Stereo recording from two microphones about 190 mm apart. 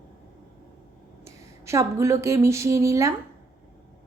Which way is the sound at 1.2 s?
15° right (ahead or behind).